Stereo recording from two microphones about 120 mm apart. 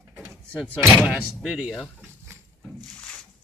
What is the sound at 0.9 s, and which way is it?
Speech, 5° right (ahead or behind).